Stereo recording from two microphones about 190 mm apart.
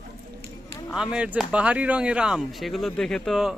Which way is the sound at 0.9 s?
5° right (ahead or behind).